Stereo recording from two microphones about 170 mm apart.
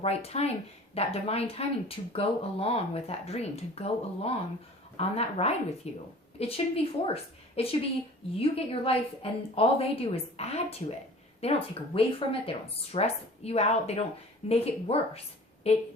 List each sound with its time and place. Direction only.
0.0 s speech: 35° left (ahead or behind)